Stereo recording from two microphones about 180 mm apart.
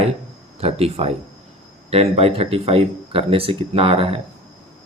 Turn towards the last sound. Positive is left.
turn(degrees=-30)  # may be behind; listen again after turning